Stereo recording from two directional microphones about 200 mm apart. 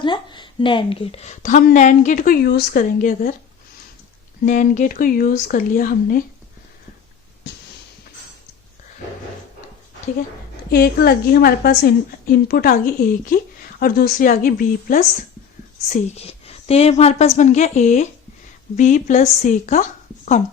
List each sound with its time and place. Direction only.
0.0 s a woman's voice: 25° left (ahead or behind); by 3.3 s 45° left (ahead or behind)
4.4 s a woman's voice: 40° left (ahead or behind)
7.5 s a sound: 60° left (ahead or behind)
10.7 s a woman's voice: 50° left (ahead or behind)
15.9 s a woman's voice: 30° left (ahead or behind)